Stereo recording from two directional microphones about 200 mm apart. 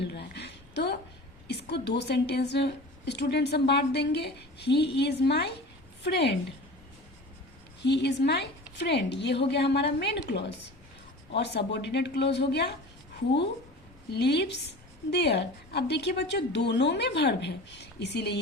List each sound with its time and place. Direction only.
0.0 s a sound: 55° left (ahead or behind)
1.5 s a woman's voice: 55° left (ahead or behind)
7.8 s a woman's voice: 60° left (ahead or behind)
14.1 s a woman's voice: 55° left (ahead or behind)